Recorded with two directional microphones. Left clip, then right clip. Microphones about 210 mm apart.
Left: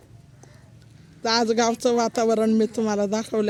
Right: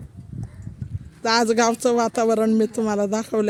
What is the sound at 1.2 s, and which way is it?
Speech, 10° right (ahead or behind).